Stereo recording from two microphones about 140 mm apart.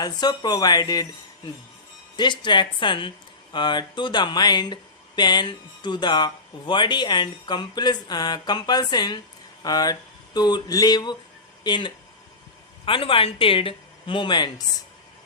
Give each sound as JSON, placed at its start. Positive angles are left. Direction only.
{"t": 0.0, "sound": "speech", "side_deg": 30}
{"t": 2.1, "sound": "speech", "side_deg": 35}